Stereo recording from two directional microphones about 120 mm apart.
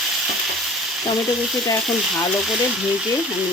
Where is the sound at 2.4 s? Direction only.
5° right (ahead or behind).